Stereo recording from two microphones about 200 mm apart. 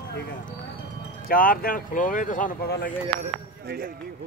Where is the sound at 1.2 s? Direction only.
45° left (ahead or behind).